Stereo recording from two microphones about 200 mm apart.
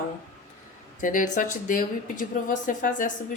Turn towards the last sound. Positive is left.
turn(degrees=40)  # may be behind; listen again after turning